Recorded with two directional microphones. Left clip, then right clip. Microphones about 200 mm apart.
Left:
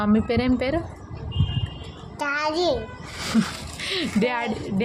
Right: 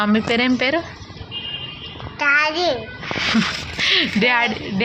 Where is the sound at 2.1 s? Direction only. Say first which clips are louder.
Right 7 dB; 25° left (ahead or behind).